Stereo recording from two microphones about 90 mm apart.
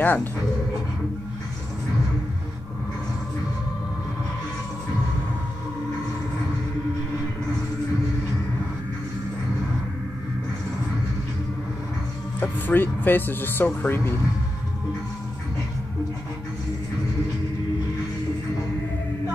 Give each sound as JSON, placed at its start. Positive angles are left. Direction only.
{"t": 0.0, "sound": "speech", "side_deg": 20}
{"t": 12.4, "sound": "speech", "side_deg": 20}